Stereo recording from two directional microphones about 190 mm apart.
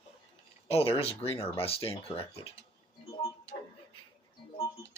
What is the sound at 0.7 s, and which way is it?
Speech, 30° left (ahead or behind).